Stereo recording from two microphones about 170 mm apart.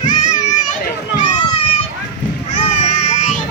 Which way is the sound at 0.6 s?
45° left (ahead or behind).